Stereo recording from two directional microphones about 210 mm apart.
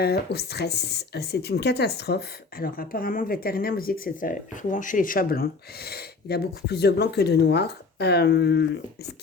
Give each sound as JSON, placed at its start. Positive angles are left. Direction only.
{"t": 0.0, "sound": "speech", "side_deg": 50}